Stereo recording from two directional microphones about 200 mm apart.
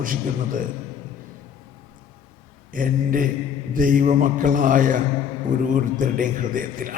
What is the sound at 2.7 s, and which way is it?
A man's voice, 45° right (ahead or behind).